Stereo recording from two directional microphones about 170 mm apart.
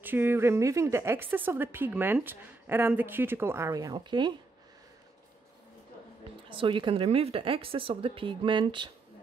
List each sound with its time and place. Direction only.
0.0 s a woman's voice: 10° right (ahead or behind)
6.5 s a woman's voice: 30° right (ahead or behind)